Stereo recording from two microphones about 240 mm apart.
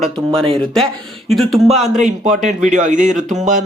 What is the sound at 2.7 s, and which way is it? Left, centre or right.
Speech, right.